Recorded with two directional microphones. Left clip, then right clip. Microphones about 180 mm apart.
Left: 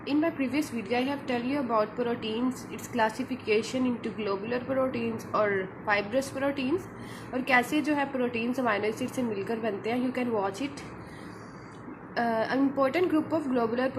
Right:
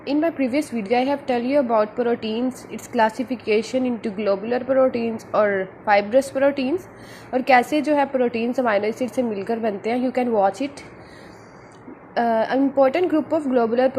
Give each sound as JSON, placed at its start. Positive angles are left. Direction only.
{"t": 0.0, "sound": "a woman's voice", "side_deg": -30}
{"t": 12.1, "sound": "a woman's voice", "side_deg": -30}